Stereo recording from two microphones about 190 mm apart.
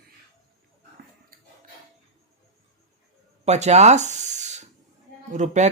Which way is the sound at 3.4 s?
35° right (ahead or behind).